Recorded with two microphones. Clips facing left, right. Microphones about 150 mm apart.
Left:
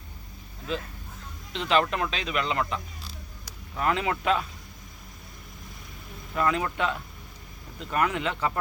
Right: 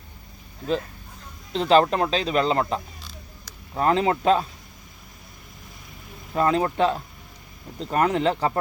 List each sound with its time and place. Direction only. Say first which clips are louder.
1.5 s speech: right 7 dB; 35° right (ahead or behind)
6.3 s speech: right 5 dB; 30° right (ahead or behind)